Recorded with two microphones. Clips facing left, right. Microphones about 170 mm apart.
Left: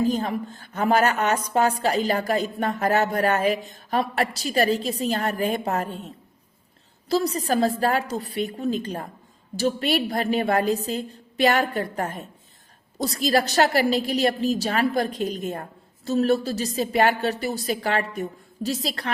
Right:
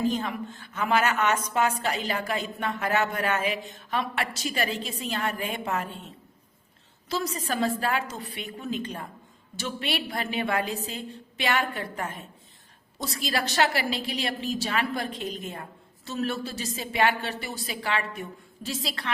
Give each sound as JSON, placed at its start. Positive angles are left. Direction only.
{"t": 0.0, "sound": "a woman's voice", "side_deg": 40}
{"t": 7.1, "sound": "a woman's voice", "side_deg": 35}